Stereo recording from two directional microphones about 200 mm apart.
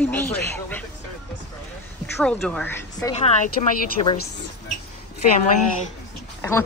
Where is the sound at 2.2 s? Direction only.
5° left (ahead or behind).